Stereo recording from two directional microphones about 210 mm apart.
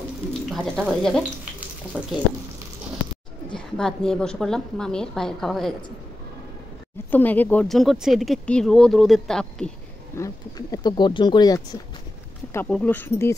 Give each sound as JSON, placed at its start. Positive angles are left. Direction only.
{"t": 0.5, "sound": "speech", "side_deg": 5}
{"t": 3.5, "sound": "speech", "side_deg": 5}
{"t": 7.1, "sound": "speech", "side_deg": 10}
{"t": 10.1, "sound": "speech", "side_deg": 15}
{"t": 12.5, "sound": "speech", "side_deg": 5}